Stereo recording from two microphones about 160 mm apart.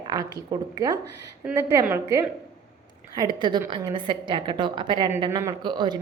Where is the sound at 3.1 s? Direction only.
25° right (ahead or behind).